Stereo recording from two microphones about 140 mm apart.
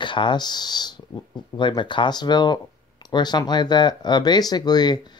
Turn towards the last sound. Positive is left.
turn(degrees=30)  # may be behind; listen again after turning